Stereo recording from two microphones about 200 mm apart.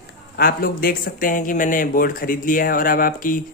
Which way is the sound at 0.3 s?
45° left (ahead or behind).